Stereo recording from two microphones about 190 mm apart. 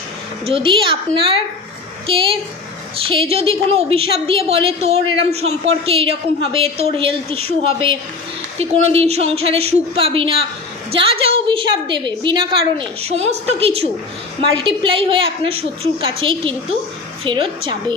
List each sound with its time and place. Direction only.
0.4 s a woman's voice: 30° right (ahead or behind)